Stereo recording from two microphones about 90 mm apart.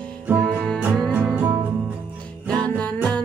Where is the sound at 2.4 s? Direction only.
10° left (ahead or behind).